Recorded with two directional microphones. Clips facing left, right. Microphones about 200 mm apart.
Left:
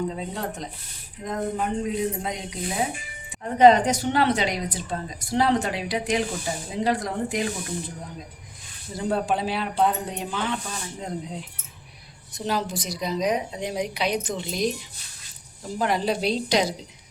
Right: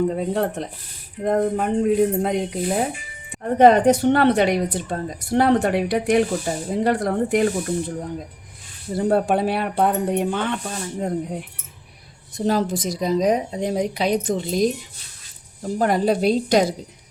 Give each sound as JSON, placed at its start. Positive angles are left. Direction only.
{"t": 0.1, "sound": "a woman's voice", "side_deg": -55}
{"t": 9.0, "sound": "a woman's voice", "side_deg": -60}
{"t": 12.5, "sound": "a woman's voice", "side_deg": -45}
{"t": 15.8, "sound": "a woman's voice", "side_deg": -50}